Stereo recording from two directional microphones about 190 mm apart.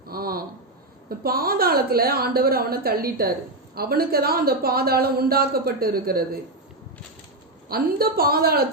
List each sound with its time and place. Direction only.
0.1 s a sound: 50° right (ahead or behind)
1.2 s speech: 50° right (ahead or behind)
7.7 s speech: 50° right (ahead or behind)